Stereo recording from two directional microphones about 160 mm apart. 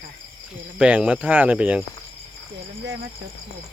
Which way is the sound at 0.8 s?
5° right (ahead or behind).